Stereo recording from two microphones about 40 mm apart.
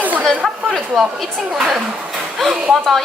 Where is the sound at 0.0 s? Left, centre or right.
Right.